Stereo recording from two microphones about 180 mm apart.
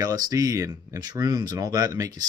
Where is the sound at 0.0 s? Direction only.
20° right (ahead or behind).